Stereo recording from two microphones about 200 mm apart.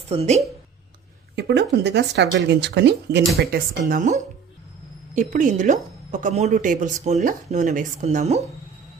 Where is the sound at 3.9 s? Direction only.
40° right (ahead or behind).